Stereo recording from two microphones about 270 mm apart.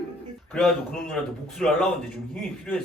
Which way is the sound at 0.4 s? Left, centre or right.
Centre.